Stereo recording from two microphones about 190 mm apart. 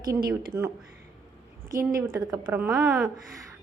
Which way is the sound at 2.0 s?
15° right (ahead or behind).